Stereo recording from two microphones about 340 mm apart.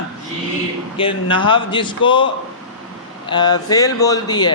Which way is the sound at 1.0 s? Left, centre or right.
Centre.